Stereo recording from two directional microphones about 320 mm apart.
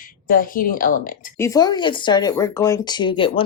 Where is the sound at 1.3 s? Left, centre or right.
Centre.